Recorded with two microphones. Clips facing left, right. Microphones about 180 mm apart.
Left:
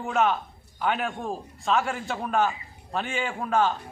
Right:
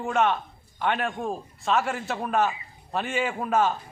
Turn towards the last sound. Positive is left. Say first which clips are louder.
# right 1 dB
turn(degrees=-5)  # may be behind; listen again after turning